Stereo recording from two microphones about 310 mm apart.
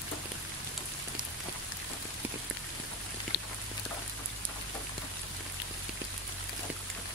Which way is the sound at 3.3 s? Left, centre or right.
Left.